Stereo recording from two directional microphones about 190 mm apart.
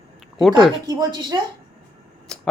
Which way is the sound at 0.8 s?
20° right (ahead or behind).